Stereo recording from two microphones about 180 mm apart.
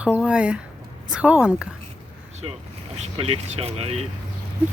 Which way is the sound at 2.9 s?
30° right (ahead or behind).